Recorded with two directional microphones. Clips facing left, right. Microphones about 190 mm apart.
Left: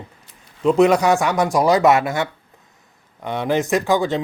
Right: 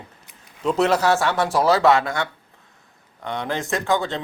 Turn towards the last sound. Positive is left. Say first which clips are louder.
# left 5 dB
turn(degrees=15)  # may be behind; listen again after turning